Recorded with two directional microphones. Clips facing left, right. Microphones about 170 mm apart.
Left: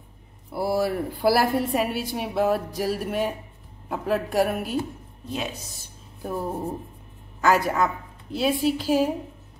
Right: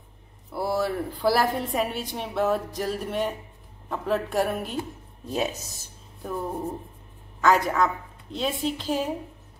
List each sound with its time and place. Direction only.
0.5 s a woman's voice: 5° left (ahead or behind)
5.3 s speech: 40° right (ahead or behind)
6.2 s a woman's voice: 10° left (ahead or behind)